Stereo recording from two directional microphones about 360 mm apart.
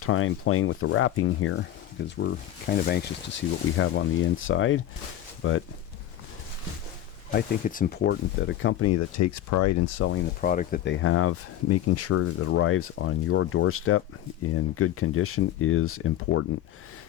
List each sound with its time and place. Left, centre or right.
0.0 s speech: left
7.3 s speech: left
10.1 s speech: left